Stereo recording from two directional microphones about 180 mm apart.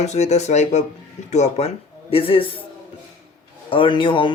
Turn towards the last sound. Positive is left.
turn(degrees=30)  # may be behind; listen again after turning